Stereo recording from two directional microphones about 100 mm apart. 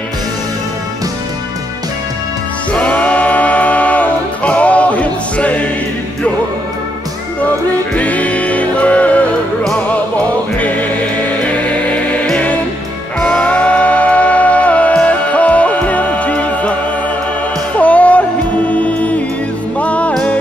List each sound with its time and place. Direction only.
2.7 s music: 15° left (ahead or behind)
7.9 s music: 15° left (ahead or behind)
17.7 s music: 15° left (ahead or behind)